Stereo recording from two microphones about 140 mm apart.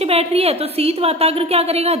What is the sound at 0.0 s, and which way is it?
A woman's voice, 45° right (ahead or behind).